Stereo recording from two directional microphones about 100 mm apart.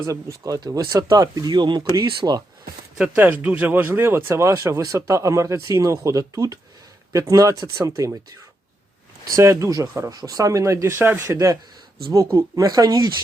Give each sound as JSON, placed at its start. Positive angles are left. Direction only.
{"t": 0.0, "sound": "speech", "side_deg": -35}
{"t": 3.0, "sound": "speech", "side_deg": -15}
{"t": 9.3, "sound": "speech", "side_deg": -30}
{"t": 10.1, "sound": "speech", "side_deg": -40}